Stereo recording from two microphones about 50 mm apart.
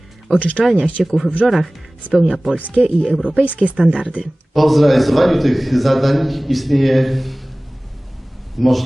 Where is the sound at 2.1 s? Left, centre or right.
Centre.